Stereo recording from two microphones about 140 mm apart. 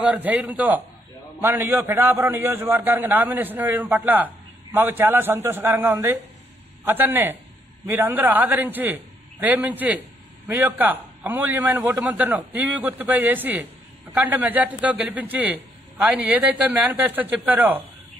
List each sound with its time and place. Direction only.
0.0 s a man's voice: 10° right (ahead or behind)